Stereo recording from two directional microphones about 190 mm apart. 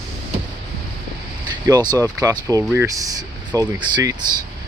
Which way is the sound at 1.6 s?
20° right (ahead or behind).